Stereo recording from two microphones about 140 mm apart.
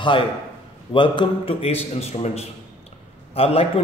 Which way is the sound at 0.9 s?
35° left (ahead or behind).